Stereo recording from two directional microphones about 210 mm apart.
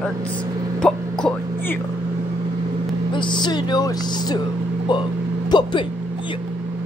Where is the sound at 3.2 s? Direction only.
20° left (ahead or behind).